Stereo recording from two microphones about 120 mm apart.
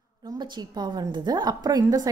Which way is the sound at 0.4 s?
40° right (ahead or behind).